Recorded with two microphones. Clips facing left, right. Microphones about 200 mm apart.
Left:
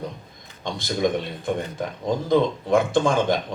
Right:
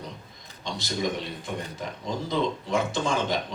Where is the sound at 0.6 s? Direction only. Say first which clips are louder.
Left 6 dB; 55° left (ahead or behind).